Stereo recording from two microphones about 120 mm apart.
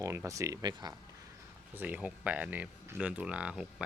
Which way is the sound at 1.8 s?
15° right (ahead or behind).